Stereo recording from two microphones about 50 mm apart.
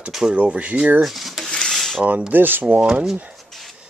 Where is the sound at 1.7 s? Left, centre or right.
Centre.